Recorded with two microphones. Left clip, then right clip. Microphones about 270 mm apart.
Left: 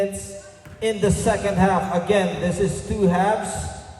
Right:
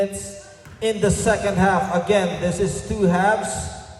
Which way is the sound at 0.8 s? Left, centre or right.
Right.